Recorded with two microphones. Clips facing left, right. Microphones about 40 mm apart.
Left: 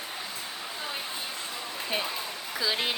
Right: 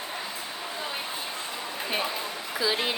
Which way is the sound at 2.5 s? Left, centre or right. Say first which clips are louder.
Right 2 dB; centre.